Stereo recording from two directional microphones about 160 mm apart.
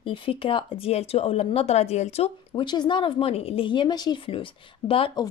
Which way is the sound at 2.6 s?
30° left (ahead or behind).